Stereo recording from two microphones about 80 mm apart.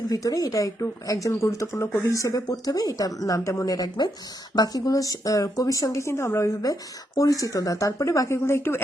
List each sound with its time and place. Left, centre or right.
0.1 s a woman's voice: left